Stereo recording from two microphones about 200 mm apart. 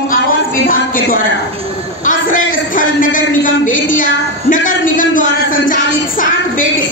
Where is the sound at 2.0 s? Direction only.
40° left (ahead or behind).